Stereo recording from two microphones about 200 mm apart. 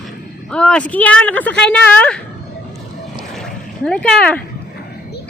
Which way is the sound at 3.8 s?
5° left (ahead or behind).